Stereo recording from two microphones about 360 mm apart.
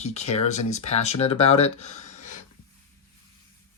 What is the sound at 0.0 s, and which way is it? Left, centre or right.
Speech, centre.